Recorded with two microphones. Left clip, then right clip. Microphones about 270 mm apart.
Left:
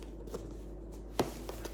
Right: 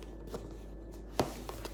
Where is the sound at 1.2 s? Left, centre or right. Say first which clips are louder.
Even; centre.